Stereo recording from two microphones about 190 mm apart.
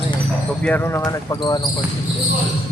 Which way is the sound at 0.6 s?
10° left (ahead or behind).